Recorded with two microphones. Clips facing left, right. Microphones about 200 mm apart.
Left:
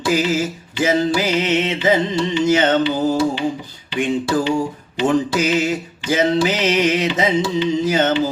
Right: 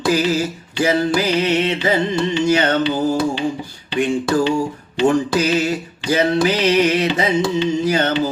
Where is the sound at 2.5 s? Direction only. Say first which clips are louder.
Left 1 dB; 20° left (ahead or behind).